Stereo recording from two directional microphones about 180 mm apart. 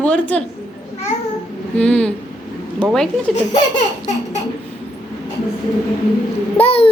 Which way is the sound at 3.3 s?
40° left (ahead or behind).